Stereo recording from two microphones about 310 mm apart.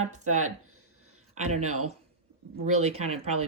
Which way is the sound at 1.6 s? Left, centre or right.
Right.